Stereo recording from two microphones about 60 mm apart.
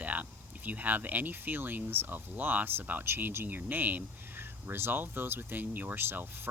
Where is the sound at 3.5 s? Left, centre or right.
Right.